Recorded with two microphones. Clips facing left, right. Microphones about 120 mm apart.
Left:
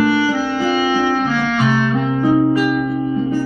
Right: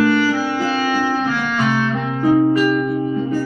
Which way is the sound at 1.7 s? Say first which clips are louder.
Left 3 dB; 15° left (ahead or behind).